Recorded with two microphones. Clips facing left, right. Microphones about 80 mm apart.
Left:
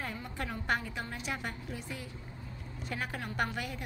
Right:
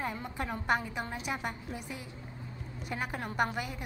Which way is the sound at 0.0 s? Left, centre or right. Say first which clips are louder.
Right 3 dB; right.